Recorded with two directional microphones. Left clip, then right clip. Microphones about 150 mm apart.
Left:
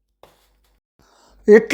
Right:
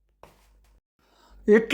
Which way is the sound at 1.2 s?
15° left (ahead or behind).